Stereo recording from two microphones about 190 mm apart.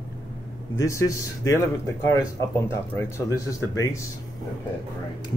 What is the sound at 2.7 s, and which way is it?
Speech, 15° left (ahead or behind).